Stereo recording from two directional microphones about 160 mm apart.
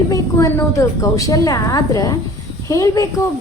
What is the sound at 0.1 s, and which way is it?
A woman's voice, 20° left (ahead or behind).